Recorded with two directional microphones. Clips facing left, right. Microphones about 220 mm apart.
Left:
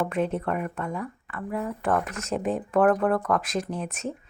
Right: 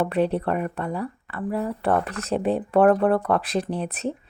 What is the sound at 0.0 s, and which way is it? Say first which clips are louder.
Speech: right 4 dB; 35° right (ahead or behind).